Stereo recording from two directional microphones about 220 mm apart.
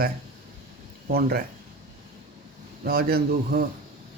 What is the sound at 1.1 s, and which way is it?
Speech, 45° right (ahead or behind).